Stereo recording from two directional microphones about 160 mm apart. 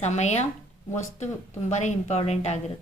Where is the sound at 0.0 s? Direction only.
45° left (ahead or behind).